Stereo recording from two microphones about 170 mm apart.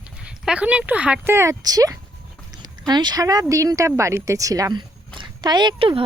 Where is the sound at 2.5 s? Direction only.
25° right (ahead or behind).